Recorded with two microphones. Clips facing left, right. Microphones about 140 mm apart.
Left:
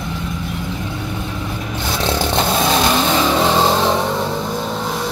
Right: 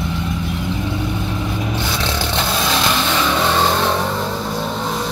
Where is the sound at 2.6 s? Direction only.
45° left (ahead or behind).